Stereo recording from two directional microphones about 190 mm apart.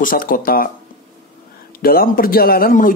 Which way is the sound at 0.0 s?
45° left (ahead or behind).